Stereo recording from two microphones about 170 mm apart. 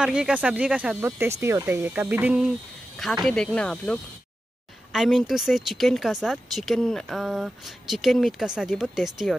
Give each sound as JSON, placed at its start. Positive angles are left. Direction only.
{"t": 0.0, "sound": "speech", "side_deg": -5}